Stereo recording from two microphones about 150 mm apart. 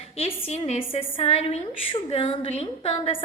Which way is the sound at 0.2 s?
40° left (ahead or behind).